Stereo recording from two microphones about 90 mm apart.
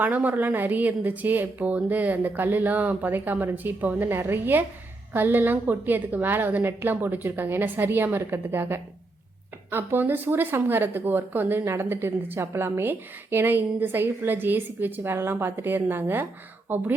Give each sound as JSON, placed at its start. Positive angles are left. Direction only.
{"t": 0.0, "sound": "speech", "side_deg": -20}